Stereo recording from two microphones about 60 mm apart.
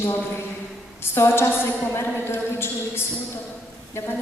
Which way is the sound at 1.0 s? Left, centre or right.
Left.